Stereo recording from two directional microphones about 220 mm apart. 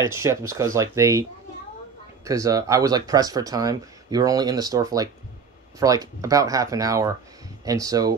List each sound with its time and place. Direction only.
0.1 s speech: 15° right (ahead or behind)
2.2 s speech: 15° right (ahead or behind)